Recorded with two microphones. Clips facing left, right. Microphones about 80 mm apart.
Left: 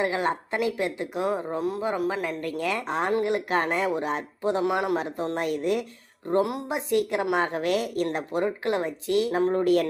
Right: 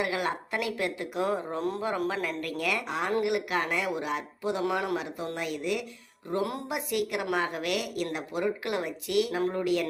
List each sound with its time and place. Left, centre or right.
0.0 s a woman's voice: left
4.6 s speech: left
4.9 s a woman's voice: left
6.4 s a woman's voice: left